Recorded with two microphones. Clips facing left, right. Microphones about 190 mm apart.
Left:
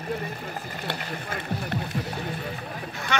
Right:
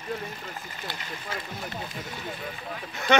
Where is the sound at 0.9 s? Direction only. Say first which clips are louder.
Left 4 dB; 65° left (ahead or behind).